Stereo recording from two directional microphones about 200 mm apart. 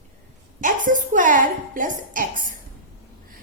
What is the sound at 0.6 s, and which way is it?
A woman's voice, 40° right (ahead or behind).